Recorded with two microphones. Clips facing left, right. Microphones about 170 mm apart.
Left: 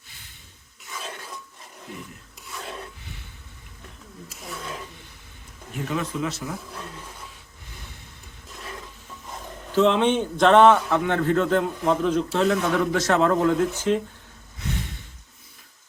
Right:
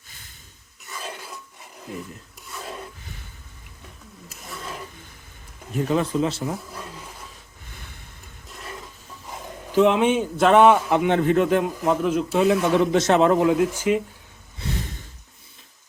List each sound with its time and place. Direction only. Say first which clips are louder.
0.9 s dishes: right 1 dB; centre (ahead or behind)
2.5 s filing: right 1 dB; centre (ahead or behind)
4.4 s filing: left 1 dB; centre (ahead or behind)
5.7 s a man's voice: right 6 dB; 35° right (ahead or behind)
8.4 s a sound: even; centre (ahead or behind)
9.3 s a man's voice: right 2 dB; 10° right (ahead or behind)
12.7 s a man's voice: right 3 dB; 20° right (ahead or behind)